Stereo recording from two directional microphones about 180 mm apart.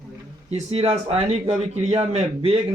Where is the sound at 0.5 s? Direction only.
35° right (ahead or behind).